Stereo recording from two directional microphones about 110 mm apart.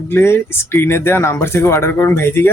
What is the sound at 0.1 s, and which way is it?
Speech, 20° left (ahead or behind).